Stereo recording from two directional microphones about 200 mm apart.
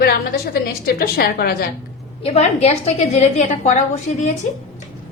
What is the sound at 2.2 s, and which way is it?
A woman's voice, 30° left (ahead or behind).